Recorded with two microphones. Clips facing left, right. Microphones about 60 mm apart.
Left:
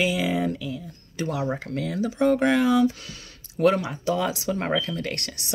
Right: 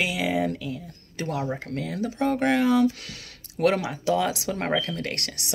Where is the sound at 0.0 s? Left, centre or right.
Right.